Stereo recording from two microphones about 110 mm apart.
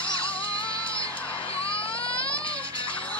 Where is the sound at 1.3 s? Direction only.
55° left (ahead or behind).